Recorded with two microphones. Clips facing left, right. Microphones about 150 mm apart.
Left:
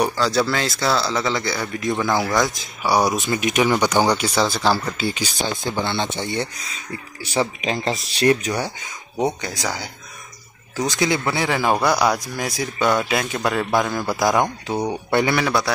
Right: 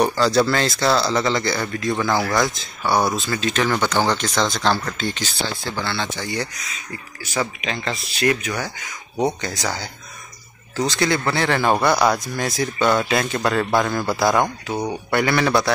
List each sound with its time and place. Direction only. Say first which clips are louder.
0.0 s speech: right 2 dB; 5° left (ahead or behind); by 8.9 s 30° left (ahead or behind)
9.1 s speech: right 1 dB; centre (ahead or behind); by 15.3 s 20° left (ahead or behind)
15.3 s speech: right 2 dB; 5° left (ahead or behind)